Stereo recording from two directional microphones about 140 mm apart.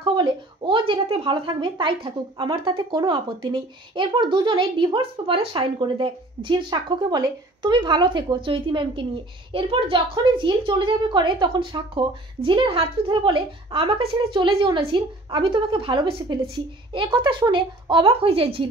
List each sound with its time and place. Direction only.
0.0 s speech: 35° right (ahead or behind)